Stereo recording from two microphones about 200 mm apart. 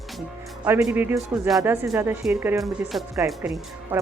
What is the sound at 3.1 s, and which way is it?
Speech, 15° right (ahead or behind).